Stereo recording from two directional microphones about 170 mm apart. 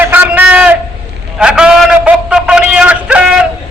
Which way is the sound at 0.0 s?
10° right (ahead or behind).